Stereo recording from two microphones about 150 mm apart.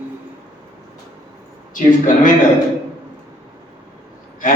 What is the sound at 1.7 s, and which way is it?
Speech, 60° left (ahead or behind).